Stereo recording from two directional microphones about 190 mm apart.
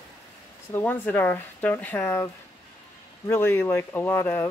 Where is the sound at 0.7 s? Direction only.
10° left (ahead or behind).